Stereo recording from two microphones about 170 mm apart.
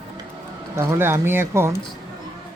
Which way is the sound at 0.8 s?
15° right (ahead or behind).